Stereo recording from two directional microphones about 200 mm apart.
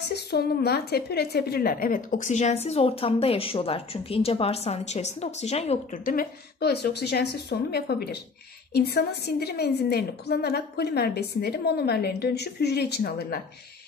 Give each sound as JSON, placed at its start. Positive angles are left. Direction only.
{"t": 0.1, "sound": "a woman's voice", "side_deg": 55}
{"t": 6.1, "sound": "a woman's voice", "side_deg": 55}